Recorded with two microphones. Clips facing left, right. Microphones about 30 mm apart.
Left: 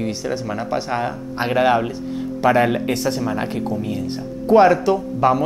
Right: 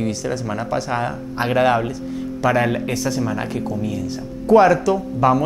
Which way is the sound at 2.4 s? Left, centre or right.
Left.